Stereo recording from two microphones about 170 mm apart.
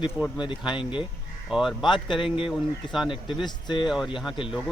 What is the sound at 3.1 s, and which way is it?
Speech, 30° left (ahead or behind).